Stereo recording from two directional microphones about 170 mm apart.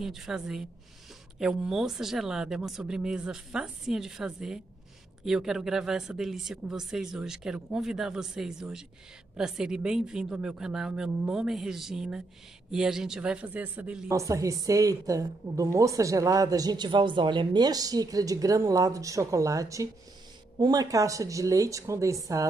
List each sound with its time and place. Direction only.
0.0 s speech: centre (ahead or behind)
14.1 s a woman's voice: 20° right (ahead or behind)